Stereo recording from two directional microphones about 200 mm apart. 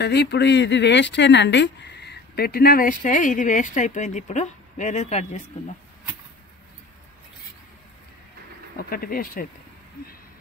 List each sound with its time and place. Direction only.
0.0 s speech: 55° left (ahead or behind); by 5.4 s 35° left (ahead or behind)
8.7 s speech: 45° left (ahead or behind)